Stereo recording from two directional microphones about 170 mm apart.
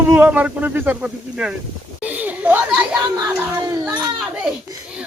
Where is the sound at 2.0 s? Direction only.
10° right (ahead or behind).